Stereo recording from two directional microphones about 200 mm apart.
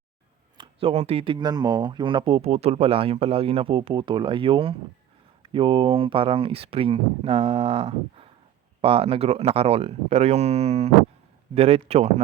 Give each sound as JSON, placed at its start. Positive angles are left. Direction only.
{"t": 0.5, "sound": "speech", "side_deg": -25}